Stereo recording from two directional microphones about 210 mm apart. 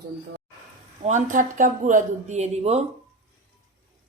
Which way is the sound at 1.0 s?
35° right (ahead or behind).